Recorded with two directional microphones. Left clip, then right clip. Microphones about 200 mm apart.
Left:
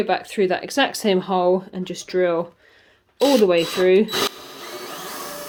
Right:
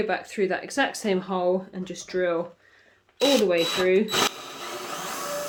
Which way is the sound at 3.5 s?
45° left (ahead or behind).